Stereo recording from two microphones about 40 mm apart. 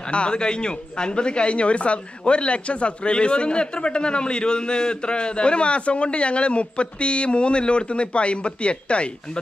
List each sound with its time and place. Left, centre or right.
0.1 s speech: left